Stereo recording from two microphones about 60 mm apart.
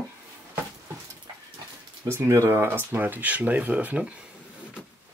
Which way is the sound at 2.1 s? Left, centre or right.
Right.